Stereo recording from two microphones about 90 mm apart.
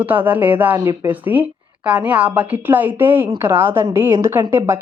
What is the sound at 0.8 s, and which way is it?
Speech, 35° right (ahead or behind).